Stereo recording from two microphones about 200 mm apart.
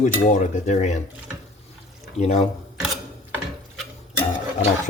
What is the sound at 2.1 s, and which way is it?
Speech, 30° left (ahead or behind).